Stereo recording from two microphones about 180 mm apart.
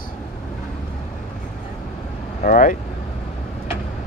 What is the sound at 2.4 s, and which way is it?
Speech, 50° left (ahead or behind).